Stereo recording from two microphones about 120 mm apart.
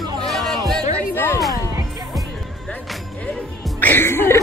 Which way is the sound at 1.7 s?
30° right (ahead or behind).